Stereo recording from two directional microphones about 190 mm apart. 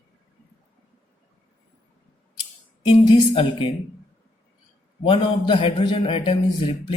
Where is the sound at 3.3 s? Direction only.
25° left (ahead or behind).